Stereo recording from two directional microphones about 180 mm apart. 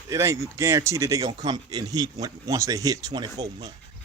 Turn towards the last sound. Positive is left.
turn(degrees=-20)  # may be behind; listen again after turning